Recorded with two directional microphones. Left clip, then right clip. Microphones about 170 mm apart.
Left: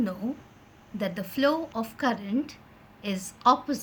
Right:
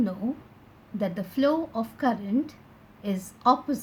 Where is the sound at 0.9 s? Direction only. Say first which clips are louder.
Right 1 dB; 30° right (ahead or behind).